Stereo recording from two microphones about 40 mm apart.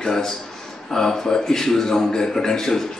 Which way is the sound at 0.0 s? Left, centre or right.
Centre.